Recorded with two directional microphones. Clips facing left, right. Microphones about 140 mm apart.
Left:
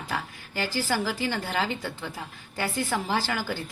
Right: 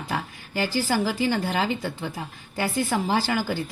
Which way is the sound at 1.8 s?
35° right (ahead or behind).